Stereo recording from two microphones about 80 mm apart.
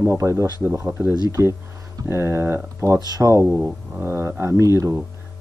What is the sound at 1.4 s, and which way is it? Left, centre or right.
Speech, right.